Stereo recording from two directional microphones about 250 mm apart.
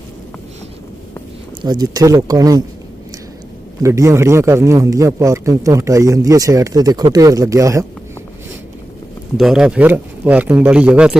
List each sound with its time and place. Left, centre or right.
1.6 s a man's voice: centre
3.8 s a man's voice: centre
9.4 s speech: centre